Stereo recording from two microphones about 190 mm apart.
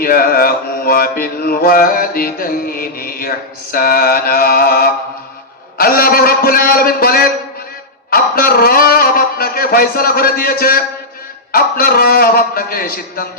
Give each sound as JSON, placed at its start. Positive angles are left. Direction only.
{"t": 0.0, "sound": "mantra", "side_deg": 50}